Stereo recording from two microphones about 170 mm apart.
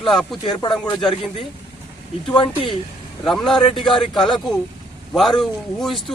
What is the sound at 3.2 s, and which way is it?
A man's voice, centre (ahead or behind).